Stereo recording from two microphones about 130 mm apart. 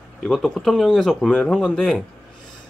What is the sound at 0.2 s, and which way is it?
Speech, centre (ahead or behind).